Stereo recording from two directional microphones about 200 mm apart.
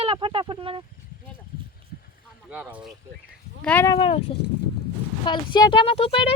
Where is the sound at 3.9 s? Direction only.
25° left (ahead or behind).